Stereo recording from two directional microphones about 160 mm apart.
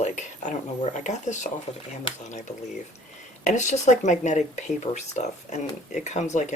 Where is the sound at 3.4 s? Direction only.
45° left (ahead or behind).